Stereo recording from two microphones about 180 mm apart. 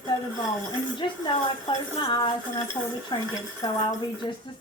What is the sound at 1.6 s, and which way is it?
A woman's voice, 30° left (ahead or behind).